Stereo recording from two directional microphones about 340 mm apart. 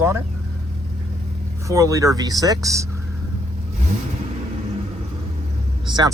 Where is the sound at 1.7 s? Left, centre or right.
Centre.